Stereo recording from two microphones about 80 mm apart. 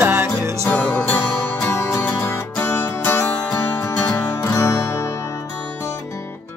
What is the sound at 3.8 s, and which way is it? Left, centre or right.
Music, left.